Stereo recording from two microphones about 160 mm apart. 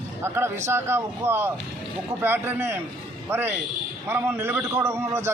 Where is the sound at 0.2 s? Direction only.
15° right (ahead or behind).